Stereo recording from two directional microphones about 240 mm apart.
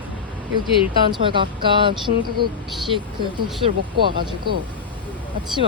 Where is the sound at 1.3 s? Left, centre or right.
Centre.